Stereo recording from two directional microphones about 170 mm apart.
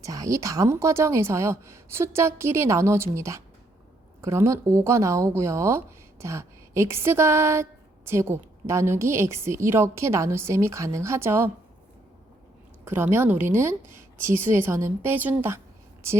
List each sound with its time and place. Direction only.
0.0 s speech: 20° right (ahead or behind)
12.8 s speech: 15° right (ahead or behind)